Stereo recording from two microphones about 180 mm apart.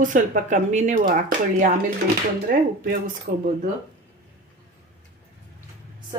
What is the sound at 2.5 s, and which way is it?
Speech, 50° right (ahead or behind).